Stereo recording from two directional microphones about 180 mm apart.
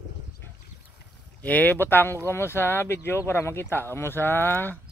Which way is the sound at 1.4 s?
10° left (ahead or behind).